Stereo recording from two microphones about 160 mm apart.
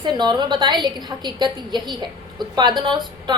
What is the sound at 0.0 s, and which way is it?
A woman's voice, 30° right (ahead or behind).